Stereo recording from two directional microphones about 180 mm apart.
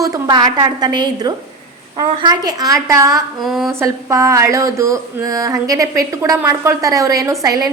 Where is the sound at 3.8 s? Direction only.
15° right (ahead or behind).